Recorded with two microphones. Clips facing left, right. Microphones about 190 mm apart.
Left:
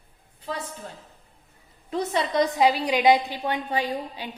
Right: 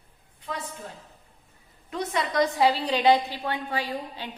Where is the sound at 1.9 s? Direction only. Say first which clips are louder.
Left 3 dB; 30° left (ahead or behind).